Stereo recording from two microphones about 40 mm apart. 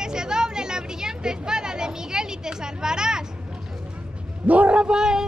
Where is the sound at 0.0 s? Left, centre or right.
Centre.